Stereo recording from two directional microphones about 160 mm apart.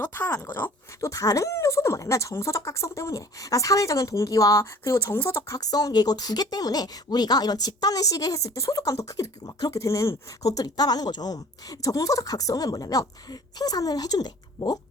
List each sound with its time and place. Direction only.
0.0 s speech: 15° left (ahead or behind)